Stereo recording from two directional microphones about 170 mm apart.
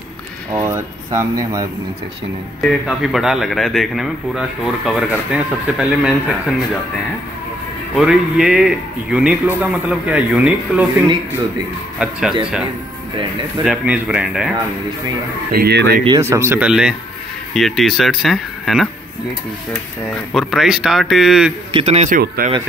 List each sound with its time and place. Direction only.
0.5 s a man's voice: 15° right (ahead or behind)
2.6 s a man's voice: centre (ahead or behind)
7.9 s a man's voice: 5° right (ahead or behind)
12.0 s a man's voice: 5° right (ahead or behind)
13.7 s a man's voice: 5° right (ahead or behind)
15.5 s speech: 75° right (ahead or behind)
16.2 s a man's voice: 15° right (ahead or behind); by 18.9 s centre (ahead or behind)
20.3 s a man's voice: centre (ahead or behind)
21.7 s a man's voice: 40° right (ahead or behind)
22.1 s speech: 55° right (ahead or behind)